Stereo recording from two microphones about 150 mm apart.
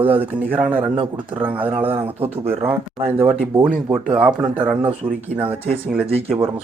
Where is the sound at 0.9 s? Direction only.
35° right (ahead or behind).